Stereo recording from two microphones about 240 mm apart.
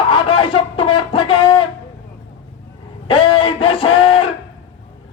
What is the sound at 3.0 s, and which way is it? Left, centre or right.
Speech, left.